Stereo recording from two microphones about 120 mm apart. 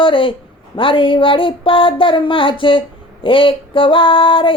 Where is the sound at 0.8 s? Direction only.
45° left (ahead or behind).